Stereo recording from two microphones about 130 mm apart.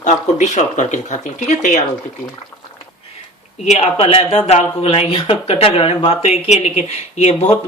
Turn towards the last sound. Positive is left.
turn(degrees=50)  # may be behind; listen again after turning